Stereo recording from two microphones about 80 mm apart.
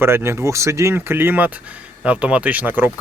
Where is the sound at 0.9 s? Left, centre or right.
Right.